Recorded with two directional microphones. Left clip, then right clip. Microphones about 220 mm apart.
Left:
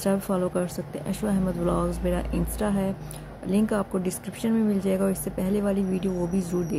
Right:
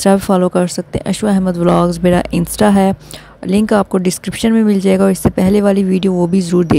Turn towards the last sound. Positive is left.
turn(degrees=-40)  # may be behind; listen again after turning